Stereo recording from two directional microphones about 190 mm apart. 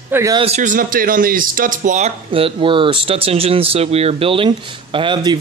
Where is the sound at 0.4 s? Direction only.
40° right (ahead or behind).